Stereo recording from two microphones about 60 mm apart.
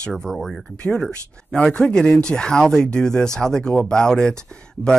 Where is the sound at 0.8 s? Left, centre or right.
Left.